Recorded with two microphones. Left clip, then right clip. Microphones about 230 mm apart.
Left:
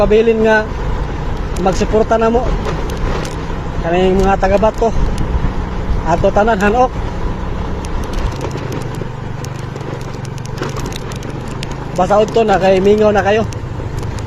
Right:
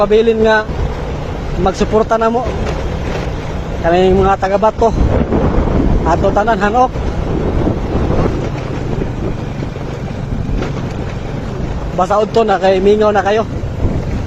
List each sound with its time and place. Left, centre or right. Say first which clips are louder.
0.0 s speech: even; right
1.6 s speech: even; right
3.9 s speech: right 1 dB; right
6.1 s speech: left 1 dB; right
11.9 s speech: left 1 dB; right